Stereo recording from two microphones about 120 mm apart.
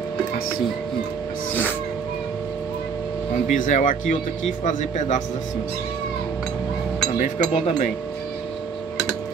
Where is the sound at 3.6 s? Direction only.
90° left.